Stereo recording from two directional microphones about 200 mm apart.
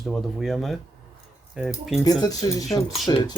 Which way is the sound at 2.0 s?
20° left (ahead or behind).